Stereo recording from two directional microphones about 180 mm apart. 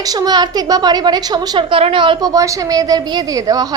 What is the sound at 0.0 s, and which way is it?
A woman's voice, 20° right (ahead or behind).